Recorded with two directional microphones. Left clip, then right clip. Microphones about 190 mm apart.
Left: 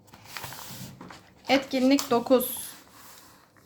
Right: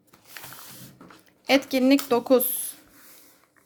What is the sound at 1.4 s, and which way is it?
A woman's voice, 40° right (ahead or behind).